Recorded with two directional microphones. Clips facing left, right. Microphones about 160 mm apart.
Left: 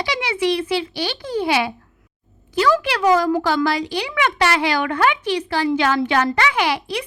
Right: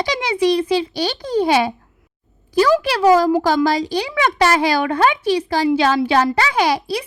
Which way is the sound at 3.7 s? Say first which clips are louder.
Right 3 dB; 40° right (ahead or behind).